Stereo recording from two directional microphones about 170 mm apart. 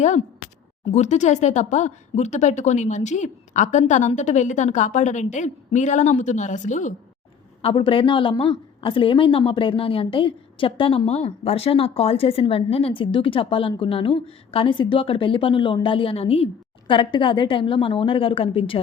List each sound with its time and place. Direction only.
0.0 s speech: 45° left (ahead or behind)
7.6 s a woman's voice: 30° left (ahead or behind)